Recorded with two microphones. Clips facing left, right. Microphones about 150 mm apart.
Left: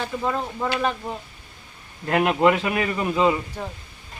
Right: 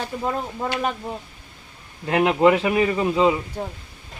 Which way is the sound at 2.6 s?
20° right (ahead or behind).